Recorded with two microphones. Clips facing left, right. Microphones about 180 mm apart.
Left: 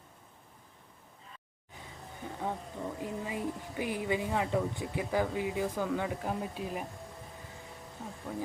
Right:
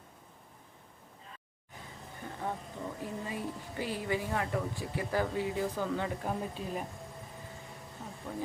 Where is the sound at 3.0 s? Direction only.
15° left (ahead or behind).